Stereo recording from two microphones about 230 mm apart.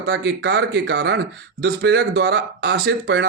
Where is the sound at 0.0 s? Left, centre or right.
Right.